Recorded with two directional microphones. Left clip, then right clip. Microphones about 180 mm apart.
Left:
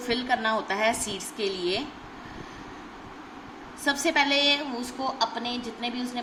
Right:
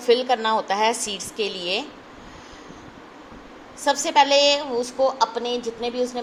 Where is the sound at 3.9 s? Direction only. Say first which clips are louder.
Right 6 dB; 25° right (ahead or behind).